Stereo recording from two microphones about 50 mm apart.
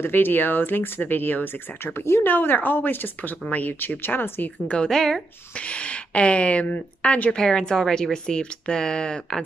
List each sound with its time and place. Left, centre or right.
0.0 s speech: left
2.0 s speech: left
2.2 s a woman's voice: left
4.6 s speech: centre
5.5 s speech: left
7.3 s speech: centre